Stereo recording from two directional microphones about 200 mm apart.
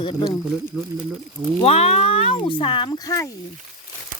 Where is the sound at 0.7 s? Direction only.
5° right (ahead or behind).